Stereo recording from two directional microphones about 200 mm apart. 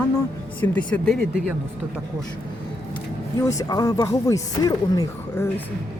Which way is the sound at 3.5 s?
15° left (ahead or behind).